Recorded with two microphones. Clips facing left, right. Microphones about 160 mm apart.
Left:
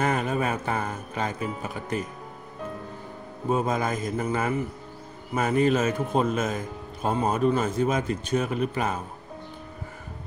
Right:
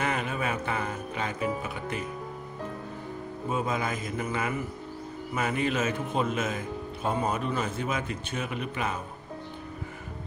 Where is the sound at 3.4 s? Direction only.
40° left (ahead or behind).